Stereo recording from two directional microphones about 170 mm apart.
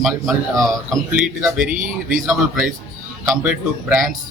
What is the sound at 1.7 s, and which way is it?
Speech, 50° right (ahead or behind).